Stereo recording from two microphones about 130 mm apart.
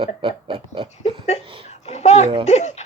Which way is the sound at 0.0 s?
40° right (ahead or behind).